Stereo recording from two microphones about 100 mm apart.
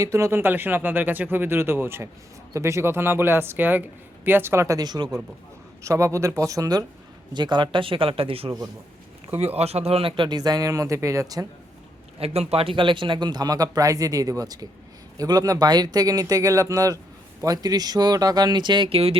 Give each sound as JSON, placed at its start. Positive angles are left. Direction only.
{"t": 0.0, "sound": "speech", "side_deg": -30}
{"t": 4.8, "sound": "speech", "side_deg": -45}
{"t": 5.8, "sound": "speech", "side_deg": -30}
{"t": 7.3, "sound": "speech", "side_deg": -50}
{"t": 9.6, "sound": "a man's voice", "side_deg": -90}
{"t": 10.2, "sound": "speech", "side_deg": -40}
{"t": 12.2, "sound": "speech", "side_deg": -90}
{"t": 18.9, "sound": "a man's voice", "side_deg": -80}